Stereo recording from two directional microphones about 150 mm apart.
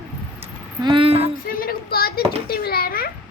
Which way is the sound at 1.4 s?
75° left (ahead or behind).